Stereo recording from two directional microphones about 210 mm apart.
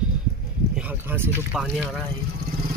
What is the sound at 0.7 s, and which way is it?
Speech, 10° right (ahead or behind).